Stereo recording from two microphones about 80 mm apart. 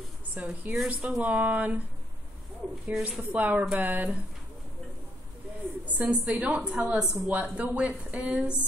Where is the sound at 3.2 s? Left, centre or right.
Centre.